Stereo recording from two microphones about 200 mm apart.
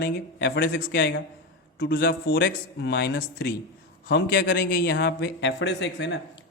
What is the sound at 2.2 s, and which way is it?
A man's voice, 60° left (ahead or behind).